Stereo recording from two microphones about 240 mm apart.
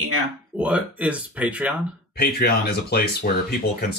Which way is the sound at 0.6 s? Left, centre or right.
Centre.